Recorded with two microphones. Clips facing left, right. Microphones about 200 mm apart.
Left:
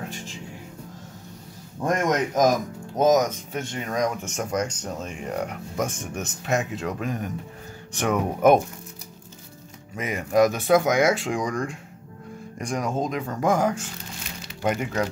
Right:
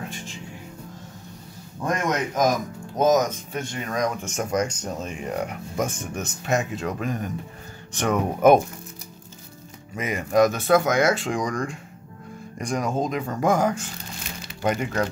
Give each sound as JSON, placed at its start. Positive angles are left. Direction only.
{"t": 2.0, "sound": "a man's voice", "side_deg": 40}
{"t": 3.0, "sound": "speech", "side_deg": 15}
{"t": 4.2, "sound": "speech", "side_deg": 0}
{"t": 9.9, "sound": "speech", "side_deg": 0}